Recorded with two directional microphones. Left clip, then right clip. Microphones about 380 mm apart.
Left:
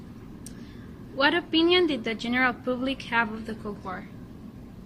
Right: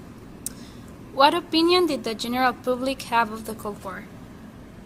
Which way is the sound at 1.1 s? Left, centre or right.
Centre.